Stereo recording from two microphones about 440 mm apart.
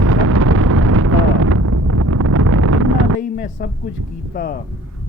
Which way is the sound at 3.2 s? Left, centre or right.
Left.